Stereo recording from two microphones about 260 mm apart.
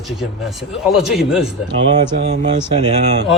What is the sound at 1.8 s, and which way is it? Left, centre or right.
Speech, right.